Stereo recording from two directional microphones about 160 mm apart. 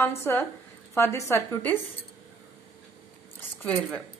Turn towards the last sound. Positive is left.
turn(degrees=15)  # may be behind; listen again after turning